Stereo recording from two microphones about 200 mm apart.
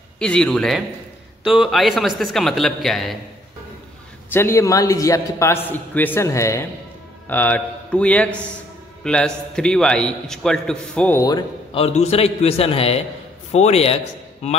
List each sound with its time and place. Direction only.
0.2 s a man's voice: 5° left (ahead or behind)
4.3 s a man's voice: 10° left (ahead or behind); by 14.6 s 35° left (ahead or behind)